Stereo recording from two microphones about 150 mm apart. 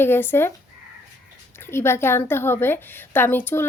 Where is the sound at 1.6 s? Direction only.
15° left (ahead or behind).